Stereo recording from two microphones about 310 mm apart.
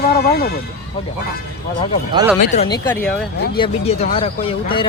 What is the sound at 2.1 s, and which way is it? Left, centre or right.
Speech, centre.